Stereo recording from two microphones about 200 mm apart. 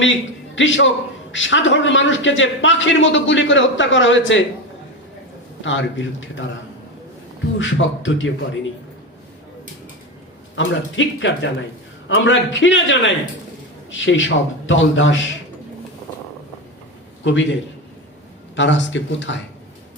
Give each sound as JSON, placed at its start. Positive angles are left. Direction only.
{"t": 0.0, "sound": "a man's voice", "side_deg": 70}
{"t": 5.6, "sound": "a man's voice", "side_deg": 70}
{"t": 7.6, "sound": "a man's voice", "side_deg": 70}
{"t": 10.5, "sound": "a man's voice", "side_deg": 70}
{"t": 17.2, "sound": "a man's voice", "side_deg": 65}